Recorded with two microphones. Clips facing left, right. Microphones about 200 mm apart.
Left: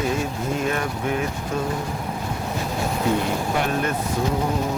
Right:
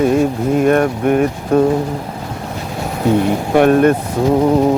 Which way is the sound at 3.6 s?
55° right (ahead or behind).